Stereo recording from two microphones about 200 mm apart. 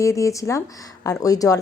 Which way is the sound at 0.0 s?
15° left (ahead or behind).